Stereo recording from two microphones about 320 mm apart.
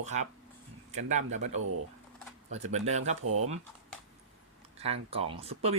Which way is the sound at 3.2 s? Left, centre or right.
Right.